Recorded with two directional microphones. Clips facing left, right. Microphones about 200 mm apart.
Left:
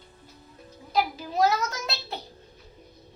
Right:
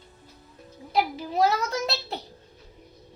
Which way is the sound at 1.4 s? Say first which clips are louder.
Right 1 dB; 30° right (ahead or behind).